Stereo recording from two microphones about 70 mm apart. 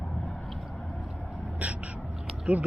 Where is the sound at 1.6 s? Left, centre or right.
Centre.